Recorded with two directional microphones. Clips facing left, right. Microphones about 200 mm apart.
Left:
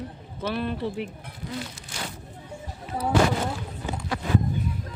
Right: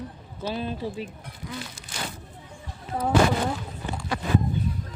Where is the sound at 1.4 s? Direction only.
30° left (ahead or behind).